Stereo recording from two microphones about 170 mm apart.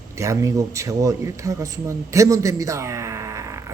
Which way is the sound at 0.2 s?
20° right (ahead or behind).